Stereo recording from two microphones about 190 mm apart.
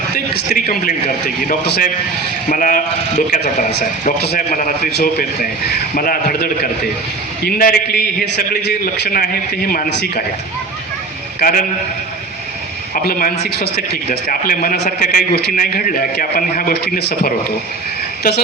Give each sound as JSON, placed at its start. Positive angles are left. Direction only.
{"t": 0.3, "sound": "a man's voice", "side_deg": 50}
{"t": 1.6, "sound": "a man's voice", "side_deg": 60}
{"t": 2.5, "sound": "a man's voice", "side_deg": 45}
{"t": 11.3, "sound": "a man's voice", "side_deg": 50}
{"t": 12.9, "sound": "a man's voice", "side_deg": 50}